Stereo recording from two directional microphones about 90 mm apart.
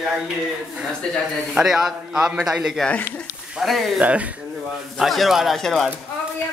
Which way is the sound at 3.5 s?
Centre (ahead or behind).